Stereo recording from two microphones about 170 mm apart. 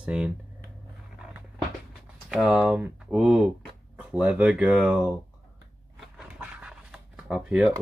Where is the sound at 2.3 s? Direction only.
5° right (ahead or behind).